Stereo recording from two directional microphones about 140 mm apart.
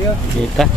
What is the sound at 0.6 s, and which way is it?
Speech, centre (ahead or behind).